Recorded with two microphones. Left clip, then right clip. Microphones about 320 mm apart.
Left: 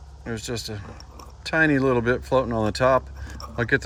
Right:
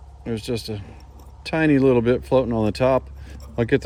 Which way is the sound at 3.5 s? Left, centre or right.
Centre.